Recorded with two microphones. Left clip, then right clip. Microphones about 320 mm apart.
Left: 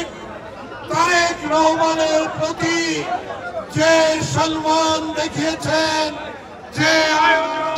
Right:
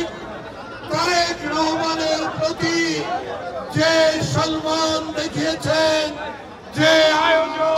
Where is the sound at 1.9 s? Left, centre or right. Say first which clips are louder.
Left 4 dB; centre.